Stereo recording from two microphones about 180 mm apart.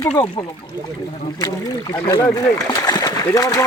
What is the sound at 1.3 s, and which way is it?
Speech, 20° left (ahead or behind).